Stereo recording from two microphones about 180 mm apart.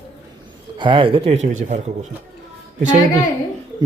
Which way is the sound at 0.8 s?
30° right (ahead or behind).